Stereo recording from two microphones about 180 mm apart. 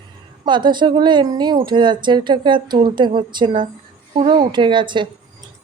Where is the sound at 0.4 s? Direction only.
25° right (ahead or behind).